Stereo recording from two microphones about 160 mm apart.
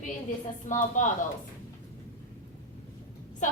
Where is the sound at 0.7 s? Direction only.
55° left (ahead or behind).